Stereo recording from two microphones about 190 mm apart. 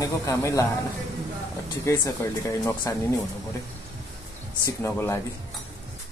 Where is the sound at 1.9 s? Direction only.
15° left (ahead or behind).